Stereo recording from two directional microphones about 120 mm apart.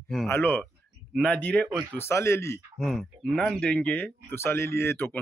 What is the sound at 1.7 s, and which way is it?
Speech, 40° right (ahead or behind).